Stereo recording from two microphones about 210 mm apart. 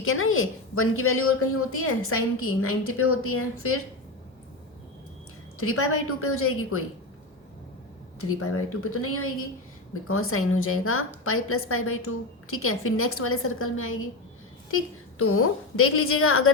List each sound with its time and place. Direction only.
0.0 s a woman's voice: 75° left (ahead or behind)
5.5 s a woman's voice: 90° left
8.2 s a woman's voice: 90° left